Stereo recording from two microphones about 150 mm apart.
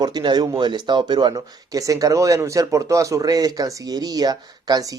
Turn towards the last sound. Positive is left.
turn(degrees=-25)  # may be behind; listen again after turning